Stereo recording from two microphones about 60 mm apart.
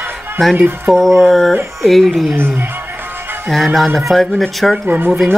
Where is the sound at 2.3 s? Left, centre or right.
Right.